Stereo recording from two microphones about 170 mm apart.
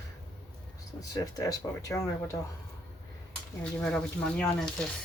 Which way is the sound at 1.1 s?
20° left (ahead or behind).